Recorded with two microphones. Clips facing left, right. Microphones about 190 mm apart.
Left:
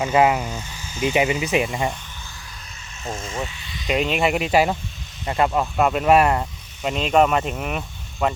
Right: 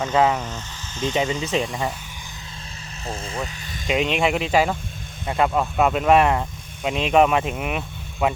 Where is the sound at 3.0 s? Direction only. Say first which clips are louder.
Left 1 dB; 35° right (ahead or behind).